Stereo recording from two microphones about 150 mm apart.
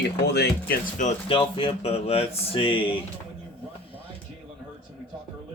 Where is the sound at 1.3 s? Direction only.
35° left (ahead or behind).